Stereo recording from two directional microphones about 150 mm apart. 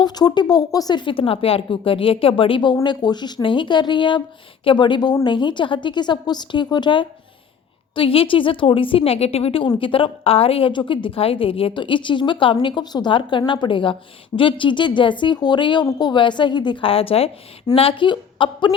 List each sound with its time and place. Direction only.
0.0 s a woman's voice: 25° left (ahead or behind)